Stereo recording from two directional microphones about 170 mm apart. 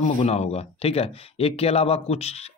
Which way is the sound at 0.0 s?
40° left (ahead or behind).